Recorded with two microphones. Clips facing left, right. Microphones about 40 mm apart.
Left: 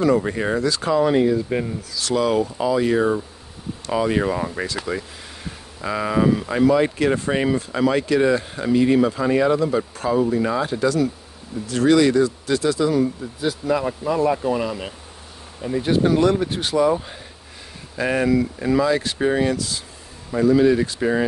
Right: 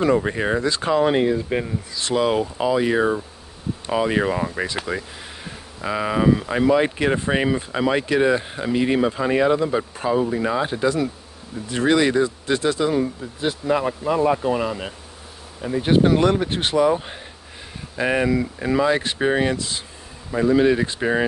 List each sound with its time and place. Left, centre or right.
0.0 s speech: right; by 15.0 s centre
15.8 s speech: right
16.7 s speech: right
17.9 s speech: centre
18.9 s speech: right